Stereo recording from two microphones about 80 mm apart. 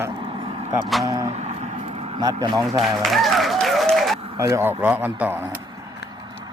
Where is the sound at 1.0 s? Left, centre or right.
Right.